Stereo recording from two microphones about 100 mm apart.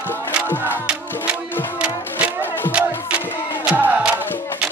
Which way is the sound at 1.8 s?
15° right (ahead or behind).